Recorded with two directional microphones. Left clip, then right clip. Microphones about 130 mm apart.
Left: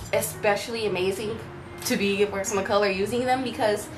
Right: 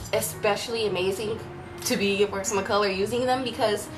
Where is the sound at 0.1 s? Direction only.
10° right (ahead or behind).